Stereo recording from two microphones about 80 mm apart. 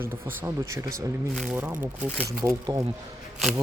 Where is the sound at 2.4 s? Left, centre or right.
Right.